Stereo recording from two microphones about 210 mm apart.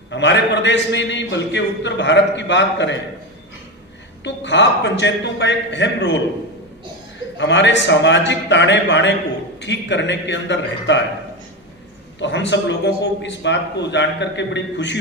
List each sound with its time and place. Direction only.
0.1 s a man's voice: 55° left (ahead or behind)
4.2 s a man's voice: 55° left (ahead or behind)
7.3 s a man's voice: 55° left (ahead or behind)
12.2 s a man's voice: 60° left (ahead or behind)